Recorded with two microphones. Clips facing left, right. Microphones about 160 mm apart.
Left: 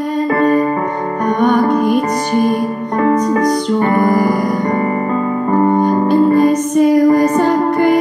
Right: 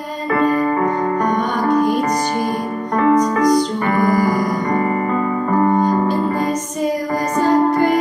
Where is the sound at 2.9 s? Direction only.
35° left (ahead or behind).